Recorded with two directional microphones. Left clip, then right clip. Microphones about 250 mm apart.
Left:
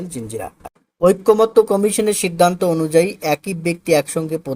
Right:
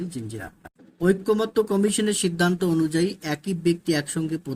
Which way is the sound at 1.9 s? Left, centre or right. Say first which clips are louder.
Left 6 dB; centre.